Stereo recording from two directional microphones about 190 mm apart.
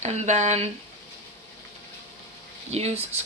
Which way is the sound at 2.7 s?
35° right (ahead or behind).